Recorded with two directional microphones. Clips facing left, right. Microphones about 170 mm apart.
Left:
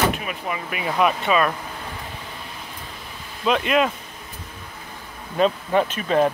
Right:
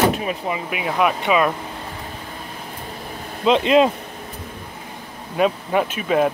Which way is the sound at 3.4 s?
25° right (ahead or behind).